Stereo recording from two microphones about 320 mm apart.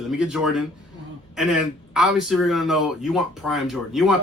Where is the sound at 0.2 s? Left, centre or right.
Centre.